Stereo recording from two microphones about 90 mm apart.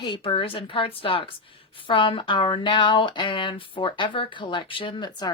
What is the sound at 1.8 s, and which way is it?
Speech, 75° left (ahead or behind).